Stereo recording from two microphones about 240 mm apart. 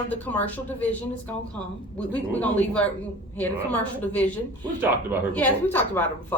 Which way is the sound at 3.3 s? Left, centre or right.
Centre.